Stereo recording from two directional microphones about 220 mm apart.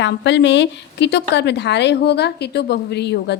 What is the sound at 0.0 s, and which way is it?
A woman's voice, 55° left (ahead or behind).